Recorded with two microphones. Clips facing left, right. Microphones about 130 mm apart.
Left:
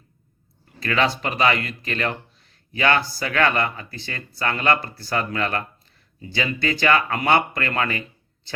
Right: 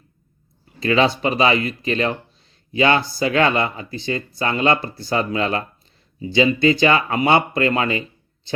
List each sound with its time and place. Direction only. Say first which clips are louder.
0.8 s speech: right 5 dB; 20° right (ahead or behind)